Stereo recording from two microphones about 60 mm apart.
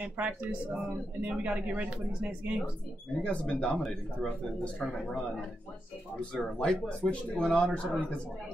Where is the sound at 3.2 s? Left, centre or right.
Centre.